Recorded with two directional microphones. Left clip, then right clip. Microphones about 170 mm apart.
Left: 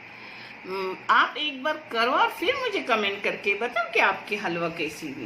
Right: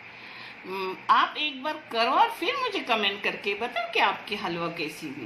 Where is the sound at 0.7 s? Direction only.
45° right (ahead or behind).